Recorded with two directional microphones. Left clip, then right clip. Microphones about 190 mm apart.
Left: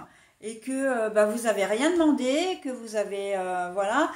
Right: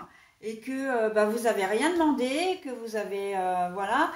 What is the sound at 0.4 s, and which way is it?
A woman's voice, 45° left (ahead or behind).